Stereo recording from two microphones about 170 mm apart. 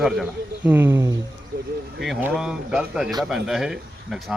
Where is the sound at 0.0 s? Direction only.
5° right (ahead or behind).